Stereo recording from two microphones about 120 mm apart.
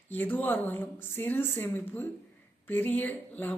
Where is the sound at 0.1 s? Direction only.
15° left (ahead or behind).